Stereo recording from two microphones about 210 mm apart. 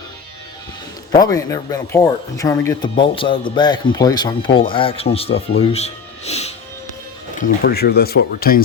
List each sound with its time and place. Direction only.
1.2 s speech: 15° left (ahead or behind)
7.3 s speech: 45° left (ahead or behind)